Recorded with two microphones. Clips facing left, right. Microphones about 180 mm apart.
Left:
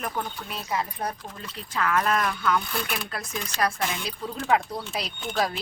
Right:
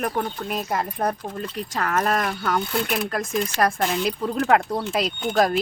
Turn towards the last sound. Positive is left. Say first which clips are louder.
# right 7 dB
turn(degrees=-50)  # may be behind; listen again after turning